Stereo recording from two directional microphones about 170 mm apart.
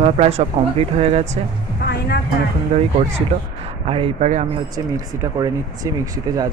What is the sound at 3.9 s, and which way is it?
Speech, 35° right (ahead or behind).